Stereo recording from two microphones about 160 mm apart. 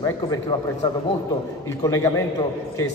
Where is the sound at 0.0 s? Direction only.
20° left (ahead or behind).